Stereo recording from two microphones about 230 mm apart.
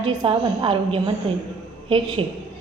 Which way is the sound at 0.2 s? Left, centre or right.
Right.